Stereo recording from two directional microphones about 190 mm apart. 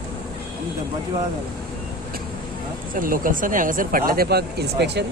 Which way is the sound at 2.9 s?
45° right (ahead or behind).